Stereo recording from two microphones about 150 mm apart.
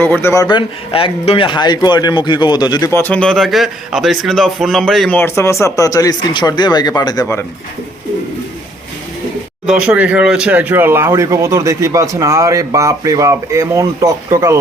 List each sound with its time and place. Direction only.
0.0 s a man's voice: 15° left (ahead or behind)
0.4 s speech: 35° left (ahead or behind)
3.0 s a man's voice: 5° left (ahead or behind)
5.1 s speech: 15° left (ahead or behind)
9.6 s speech: 5° right (ahead or behind)